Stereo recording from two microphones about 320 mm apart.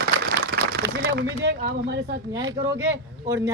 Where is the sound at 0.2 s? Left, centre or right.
Right.